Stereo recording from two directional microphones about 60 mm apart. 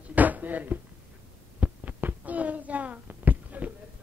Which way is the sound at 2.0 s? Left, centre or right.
Right.